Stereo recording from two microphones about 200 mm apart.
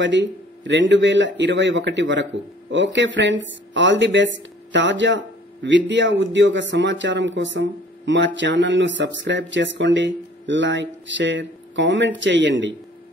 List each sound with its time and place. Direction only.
0.0 s a man's voice: 65° right (ahead or behind)